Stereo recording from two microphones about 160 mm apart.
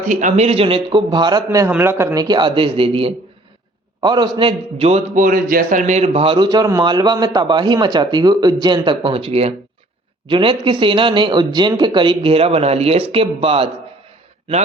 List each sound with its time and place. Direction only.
0.0 s a man's voice: 50° right (ahead or behind); by 1.4 s 30° right (ahead or behind)
1.5 s a man's voice: 15° right (ahead or behind)
2.2 s a man's voice: 30° right (ahead or behind)